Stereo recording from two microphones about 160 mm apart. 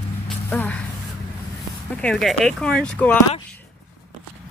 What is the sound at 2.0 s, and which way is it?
Speech, 5° left (ahead or behind).